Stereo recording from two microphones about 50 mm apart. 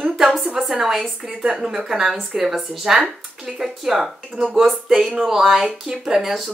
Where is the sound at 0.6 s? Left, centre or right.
Centre.